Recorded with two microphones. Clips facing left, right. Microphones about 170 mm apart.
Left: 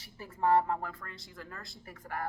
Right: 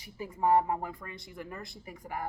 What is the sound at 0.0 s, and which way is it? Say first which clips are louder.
A woman's voice: right 1 dB; 15° right (ahead or behind).